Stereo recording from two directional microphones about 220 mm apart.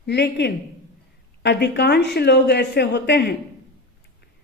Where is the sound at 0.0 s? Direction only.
50° left (ahead or behind).